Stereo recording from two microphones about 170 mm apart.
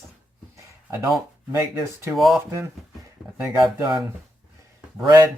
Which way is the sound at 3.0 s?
15° right (ahead or behind).